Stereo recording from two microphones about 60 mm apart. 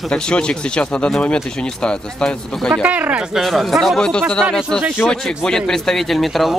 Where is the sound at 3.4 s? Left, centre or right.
Centre.